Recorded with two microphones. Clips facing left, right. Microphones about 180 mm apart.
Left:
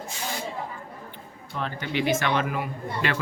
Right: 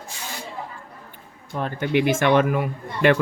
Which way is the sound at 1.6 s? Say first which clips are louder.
Right 6 dB; 50° right (ahead or behind).